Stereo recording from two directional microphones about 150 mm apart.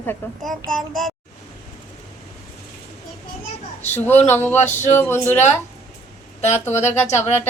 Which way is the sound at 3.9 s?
15° left (ahead or behind).